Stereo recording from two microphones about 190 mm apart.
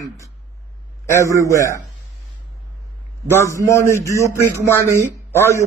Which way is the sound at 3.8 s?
15° left (ahead or behind).